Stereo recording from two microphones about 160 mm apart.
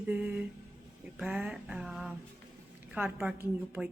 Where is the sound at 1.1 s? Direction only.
5° right (ahead or behind).